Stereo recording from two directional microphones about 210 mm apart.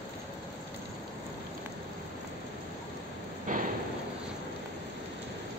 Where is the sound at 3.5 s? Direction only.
40° right (ahead or behind).